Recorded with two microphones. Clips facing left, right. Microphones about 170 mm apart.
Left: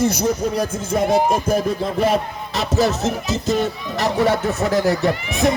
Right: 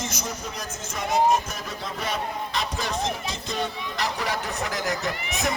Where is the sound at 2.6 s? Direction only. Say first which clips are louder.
Left 14 dB; 40° left (ahead or behind).